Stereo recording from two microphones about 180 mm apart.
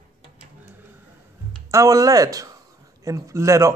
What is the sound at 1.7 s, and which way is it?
Speech, 20° right (ahead or behind).